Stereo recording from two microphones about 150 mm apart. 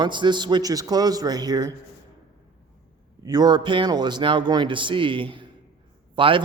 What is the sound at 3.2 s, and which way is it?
Speech, 25° right (ahead or behind).